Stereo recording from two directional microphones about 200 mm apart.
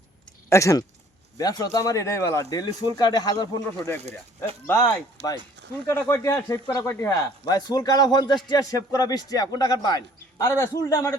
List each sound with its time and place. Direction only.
0.5 s speech: 15° left (ahead or behind)
5.8 s a man's voice: 10° left (ahead or behind)